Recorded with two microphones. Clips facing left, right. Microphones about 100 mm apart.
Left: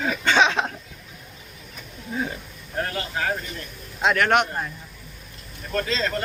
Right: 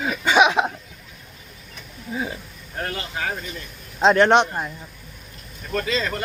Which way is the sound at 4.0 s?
30° right (ahead or behind).